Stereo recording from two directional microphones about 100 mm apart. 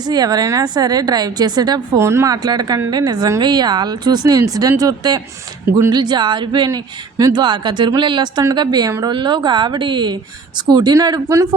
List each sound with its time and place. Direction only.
0.0 s a woman's voice: 40° right (ahead or behind)
2.0 s a woman's voice: 30° right (ahead or behind); by 6.7 s 50° right (ahead or behind)
6.7 s a woman's voice: 35° right (ahead or behind)
10.9 s a woman's voice: 35° right (ahead or behind)